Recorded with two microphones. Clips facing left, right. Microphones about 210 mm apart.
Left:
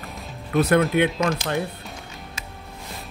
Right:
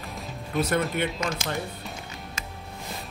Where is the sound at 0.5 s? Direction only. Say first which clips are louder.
Left 7 dB; 65° left (ahead or behind).